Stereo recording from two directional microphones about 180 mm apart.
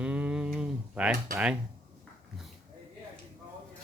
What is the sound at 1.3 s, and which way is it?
Speech, 5° right (ahead or behind).